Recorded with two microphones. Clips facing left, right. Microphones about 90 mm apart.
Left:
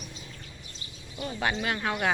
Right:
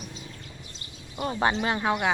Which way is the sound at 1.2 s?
40° right (ahead or behind).